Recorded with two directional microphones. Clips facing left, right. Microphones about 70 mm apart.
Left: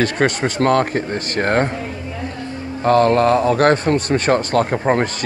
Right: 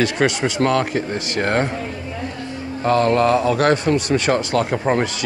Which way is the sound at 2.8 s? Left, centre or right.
Left.